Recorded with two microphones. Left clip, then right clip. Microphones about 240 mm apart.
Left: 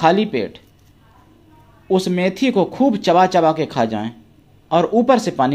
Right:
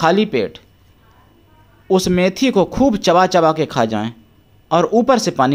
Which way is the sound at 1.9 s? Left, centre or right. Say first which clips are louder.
Right 3 dB; right.